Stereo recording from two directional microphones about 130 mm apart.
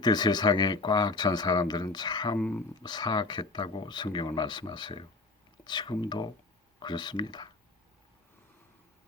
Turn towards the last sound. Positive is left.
turn(degrees=35)  # may be behind; listen again after turning